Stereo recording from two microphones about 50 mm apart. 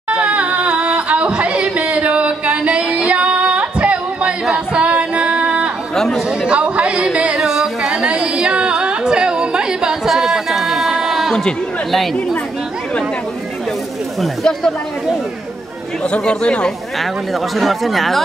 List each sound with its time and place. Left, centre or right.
0.1 s a sound: right
4.7 s female singing: right
5.9 s chatter: centre
6.4 s a sound: right
7.3 s a sound: centre
11.9 s speech: centre
14.2 s speech: centre
16.1 s speech: left
17.0 s speech: centre